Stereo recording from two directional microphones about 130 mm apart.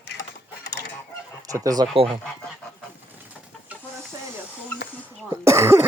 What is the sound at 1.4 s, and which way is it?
Speech, 25° right (ahead or behind).